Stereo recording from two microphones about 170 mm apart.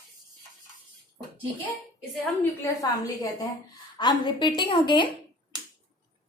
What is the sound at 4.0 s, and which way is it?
A woman's voice, 25° left (ahead or behind).